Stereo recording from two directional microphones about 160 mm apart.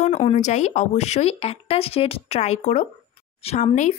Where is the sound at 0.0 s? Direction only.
45° left (ahead or behind).